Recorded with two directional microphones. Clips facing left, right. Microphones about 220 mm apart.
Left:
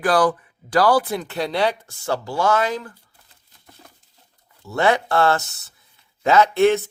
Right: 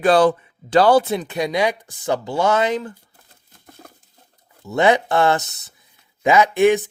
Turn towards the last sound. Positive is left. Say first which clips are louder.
# right 1 dB
turn(degrees=-15)  # may be behind; listen again after turning